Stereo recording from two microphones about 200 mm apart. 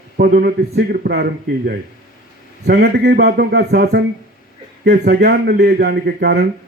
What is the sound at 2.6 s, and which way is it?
A man's voice, 55° right (ahead or behind).